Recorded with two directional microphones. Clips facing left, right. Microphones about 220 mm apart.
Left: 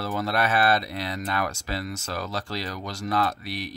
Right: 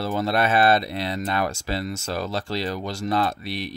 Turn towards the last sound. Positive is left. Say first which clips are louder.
# right 2 dB
turn(degrees=-25)  # may be behind; listen again after turning